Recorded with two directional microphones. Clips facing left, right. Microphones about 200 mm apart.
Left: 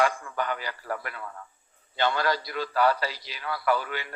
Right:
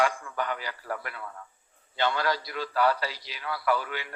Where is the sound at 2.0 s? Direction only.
45° left (ahead or behind).